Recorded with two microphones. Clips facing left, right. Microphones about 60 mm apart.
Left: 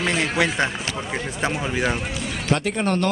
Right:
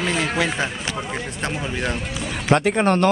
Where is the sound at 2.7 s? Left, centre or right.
Right.